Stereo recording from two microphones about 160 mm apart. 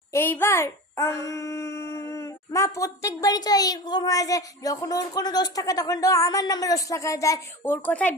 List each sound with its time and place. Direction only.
0.1 s a child's voice: 15° left (ahead or behind)